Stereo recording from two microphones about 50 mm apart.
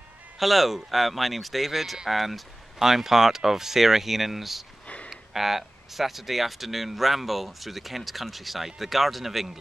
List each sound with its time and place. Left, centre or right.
0.4 s speech: centre
4.8 s a sound: left
5.1 s speech: centre